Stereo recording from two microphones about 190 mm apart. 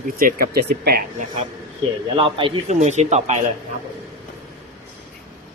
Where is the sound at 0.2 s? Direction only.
50° right (ahead or behind).